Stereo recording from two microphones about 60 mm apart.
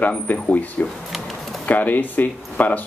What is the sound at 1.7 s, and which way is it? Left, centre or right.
Speech, left.